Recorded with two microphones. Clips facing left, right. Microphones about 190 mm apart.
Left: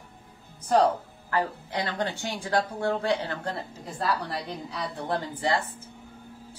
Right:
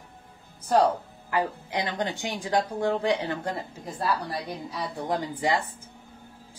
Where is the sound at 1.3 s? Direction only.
15° right (ahead or behind).